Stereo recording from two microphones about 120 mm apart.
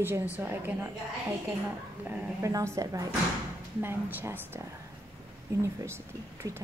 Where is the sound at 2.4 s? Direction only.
25° right (ahead or behind).